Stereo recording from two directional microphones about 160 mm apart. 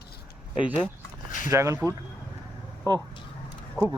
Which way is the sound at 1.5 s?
20° right (ahead or behind).